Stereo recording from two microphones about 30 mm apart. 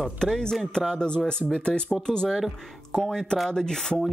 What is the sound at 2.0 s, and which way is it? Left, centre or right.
Speech, centre.